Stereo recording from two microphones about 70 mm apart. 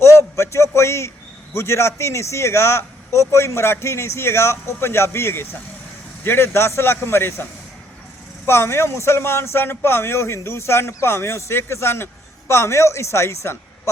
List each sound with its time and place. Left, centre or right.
0.0 s a sound: left
1.5 s speech: left
8.4 s speech: left